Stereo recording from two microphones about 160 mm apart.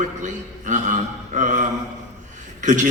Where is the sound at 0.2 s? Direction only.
50° right (ahead or behind).